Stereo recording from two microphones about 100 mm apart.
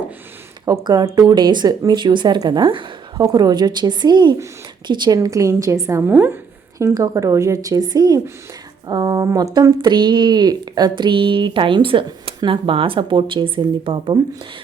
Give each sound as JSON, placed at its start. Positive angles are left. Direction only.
{"t": 0.6, "sound": "a woman's voice", "side_deg": -40}
{"t": 6.7, "sound": "a woman's voice", "side_deg": -35}
{"t": 9.8, "sound": "speech", "side_deg": -50}